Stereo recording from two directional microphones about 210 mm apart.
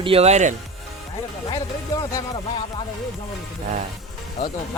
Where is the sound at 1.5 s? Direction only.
15° left (ahead or behind).